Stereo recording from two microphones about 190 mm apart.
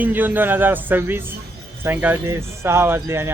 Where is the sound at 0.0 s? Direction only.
10° right (ahead or behind).